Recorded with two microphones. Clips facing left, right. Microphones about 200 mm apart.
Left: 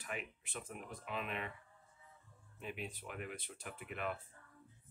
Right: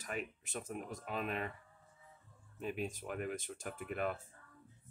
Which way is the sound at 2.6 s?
45° right (ahead or behind).